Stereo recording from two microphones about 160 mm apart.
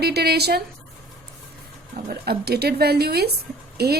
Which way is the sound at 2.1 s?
80° right.